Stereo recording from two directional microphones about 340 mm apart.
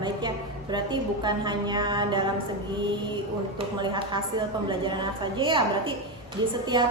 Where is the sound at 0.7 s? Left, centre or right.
Centre.